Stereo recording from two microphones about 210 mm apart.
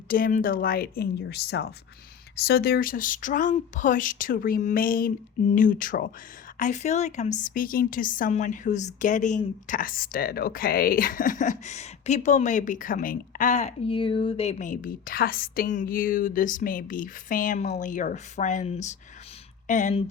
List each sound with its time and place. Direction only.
0.1 s a woman's voice: 40° left (ahead or behind)